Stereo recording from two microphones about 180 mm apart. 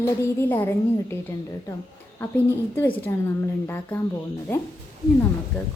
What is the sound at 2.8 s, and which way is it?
Speech, 10° left (ahead or behind).